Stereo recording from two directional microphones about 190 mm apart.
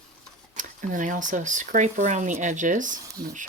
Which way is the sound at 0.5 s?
40° right (ahead or behind).